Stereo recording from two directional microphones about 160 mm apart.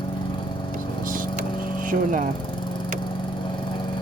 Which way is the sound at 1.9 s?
60° right (ahead or behind).